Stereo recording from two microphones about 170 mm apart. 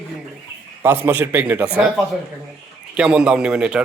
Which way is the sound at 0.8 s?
10° right (ahead or behind).